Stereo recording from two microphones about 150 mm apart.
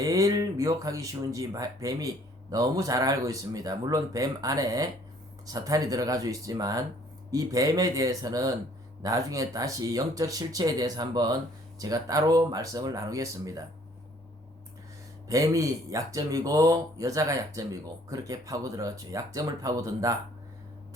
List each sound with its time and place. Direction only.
0.0 s speech: 25° right (ahead or behind)
15.3 s speech: 20° right (ahead or behind)